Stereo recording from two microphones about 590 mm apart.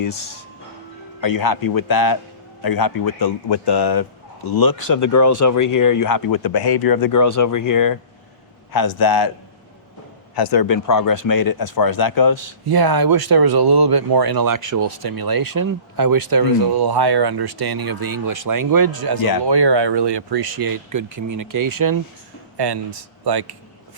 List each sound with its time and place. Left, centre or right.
1.2 s speech: left
10.3 s speech: left
12.6 s speech: right